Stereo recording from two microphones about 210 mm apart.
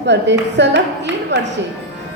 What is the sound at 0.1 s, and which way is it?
A woman's voice, 55° right (ahead or behind).